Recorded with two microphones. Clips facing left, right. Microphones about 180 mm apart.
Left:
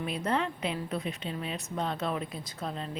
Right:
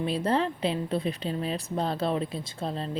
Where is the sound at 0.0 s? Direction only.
30° right (ahead or behind).